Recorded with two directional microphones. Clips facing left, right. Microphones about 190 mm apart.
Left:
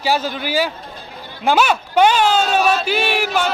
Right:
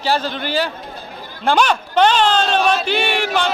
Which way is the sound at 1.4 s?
5° left (ahead or behind).